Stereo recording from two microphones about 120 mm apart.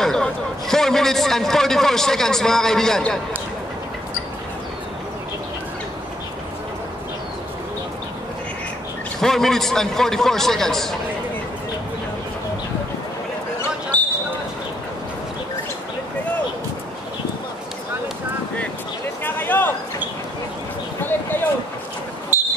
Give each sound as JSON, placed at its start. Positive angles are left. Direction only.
{"t": 0.0, "sound": "a man's voice", "side_deg": 5}
{"t": 9.2, "sound": "a man's voice", "side_deg": 5}
{"t": 13.9, "sound": "basketball bounce", "side_deg": 15}
{"t": 19.2, "sound": "a sound", "side_deg": 15}